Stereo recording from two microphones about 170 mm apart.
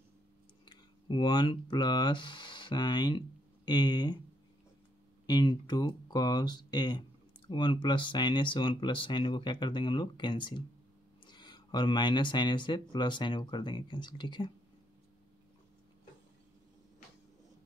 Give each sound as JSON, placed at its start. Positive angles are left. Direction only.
{"t": 0.7, "sound": "speech", "side_deg": 25}
{"t": 5.2, "sound": "speech", "side_deg": 25}